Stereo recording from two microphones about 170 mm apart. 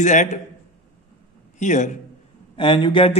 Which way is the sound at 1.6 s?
45° left (ahead or behind).